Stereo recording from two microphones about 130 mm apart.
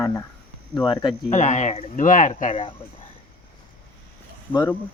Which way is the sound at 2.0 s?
85° left.